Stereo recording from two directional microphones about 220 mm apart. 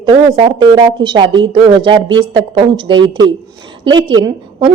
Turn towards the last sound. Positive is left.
turn(degrees=-20)  # may be behind; listen again after turning